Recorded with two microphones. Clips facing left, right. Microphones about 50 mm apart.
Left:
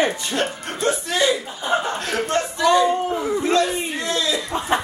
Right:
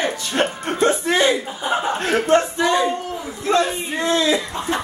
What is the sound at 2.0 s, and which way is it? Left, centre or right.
Speech, right.